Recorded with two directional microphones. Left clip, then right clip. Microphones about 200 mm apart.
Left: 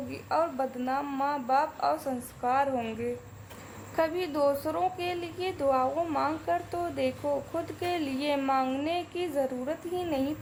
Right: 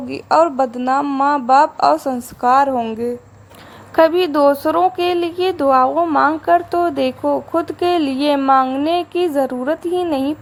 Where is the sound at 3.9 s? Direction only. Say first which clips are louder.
Right 16 dB; 30° right (ahead or behind).